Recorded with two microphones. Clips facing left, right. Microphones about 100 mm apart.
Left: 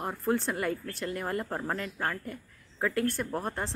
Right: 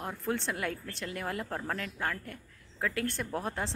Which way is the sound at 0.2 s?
5° left (ahead or behind).